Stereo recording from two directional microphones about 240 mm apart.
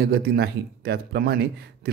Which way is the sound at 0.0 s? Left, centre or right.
Right.